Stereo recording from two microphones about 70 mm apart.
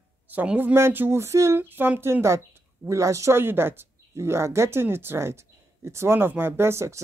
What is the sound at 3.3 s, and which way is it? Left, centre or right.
A woman's voice, right.